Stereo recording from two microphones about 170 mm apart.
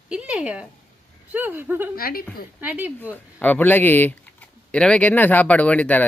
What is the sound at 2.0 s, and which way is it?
Speech, 60° left (ahead or behind).